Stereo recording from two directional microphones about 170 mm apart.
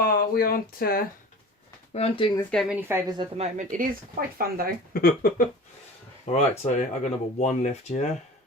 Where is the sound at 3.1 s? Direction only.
40° right (ahead or behind); by 4.8 s 60° right (ahead or behind).